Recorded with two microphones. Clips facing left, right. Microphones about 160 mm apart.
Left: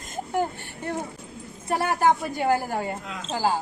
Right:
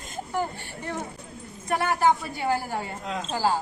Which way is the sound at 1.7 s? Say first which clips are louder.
Left 1 dB; 45° left (ahead or behind).